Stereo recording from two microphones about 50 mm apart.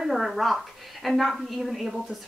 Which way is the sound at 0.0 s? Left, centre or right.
Centre.